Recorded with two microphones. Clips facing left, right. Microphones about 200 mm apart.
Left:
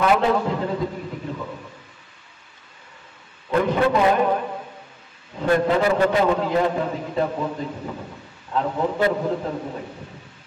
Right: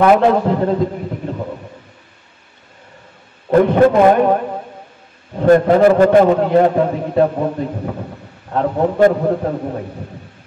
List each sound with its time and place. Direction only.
0.0 s a man's voice: 55° right (ahead or behind)
1.2 s a sound: 55° right (ahead or behind)
3.4 s a man's voice: 55° right (ahead or behind)
5.3 s a man's voice: 50° right (ahead or behind)